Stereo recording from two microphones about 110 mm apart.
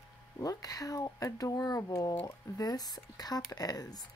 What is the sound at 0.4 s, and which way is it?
Speech, 35° left (ahead or behind).